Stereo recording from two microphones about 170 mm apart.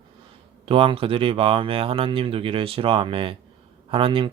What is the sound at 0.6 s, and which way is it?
Speech, 30° right (ahead or behind).